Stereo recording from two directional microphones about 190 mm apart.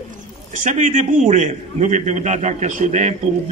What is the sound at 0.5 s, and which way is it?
A man's voice, 40° right (ahead or behind).